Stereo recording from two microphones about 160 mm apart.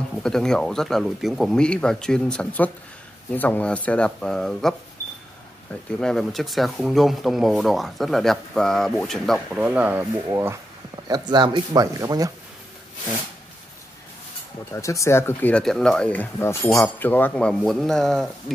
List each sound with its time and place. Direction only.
0.2 s speech: 5° left (ahead or behind); by 12.3 s 20° right (ahead or behind)
14.7 s speech: 20° left (ahead or behind); by 18.3 s centre (ahead or behind)